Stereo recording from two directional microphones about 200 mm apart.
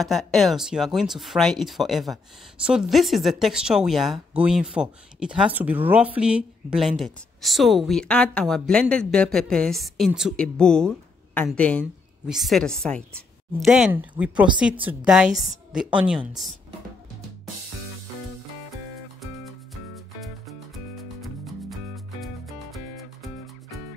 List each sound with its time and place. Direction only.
0.0 s a woman's voice: centre (ahead or behind)
19.7 s music: centre (ahead or behind)